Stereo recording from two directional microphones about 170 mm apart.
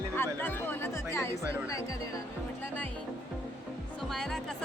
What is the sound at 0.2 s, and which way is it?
Music, 10° left (ahead or behind).